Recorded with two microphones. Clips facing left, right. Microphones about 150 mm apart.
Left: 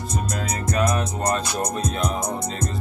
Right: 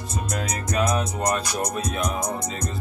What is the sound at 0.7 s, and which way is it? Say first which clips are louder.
Music: even; 15° right (ahead or behind).